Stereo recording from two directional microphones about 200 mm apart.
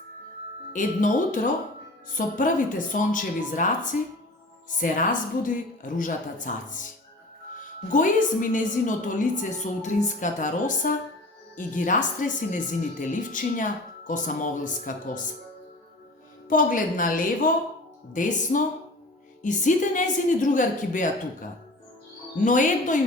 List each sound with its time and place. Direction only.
0.7 s a woman's voice: 40° left (ahead or behind)
16.5 s a woman's voice: 40° left (ahead or behind)